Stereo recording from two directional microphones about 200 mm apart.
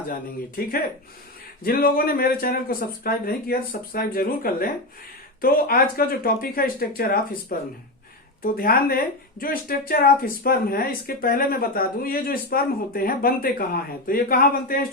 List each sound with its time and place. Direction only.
1.6 s speech: 45° left (ahead or behind)